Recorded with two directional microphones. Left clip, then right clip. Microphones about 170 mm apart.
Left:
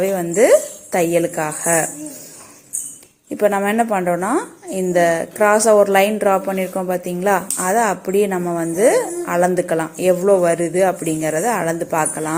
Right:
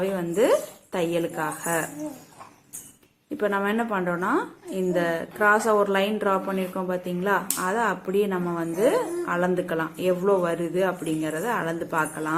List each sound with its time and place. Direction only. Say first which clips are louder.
0.0 s a woman's voice: left 8 dB; 20° left (ahead or behind)
3.3 s a woman's voice: left 8 dB; 20° left (ahead or behind)